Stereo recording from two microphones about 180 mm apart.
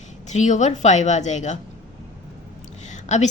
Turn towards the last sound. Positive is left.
turn(degrees=40)  # may be behind; listen again after turning